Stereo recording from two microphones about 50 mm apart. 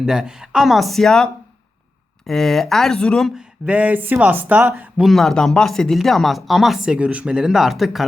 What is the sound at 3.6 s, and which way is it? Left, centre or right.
Speech, right.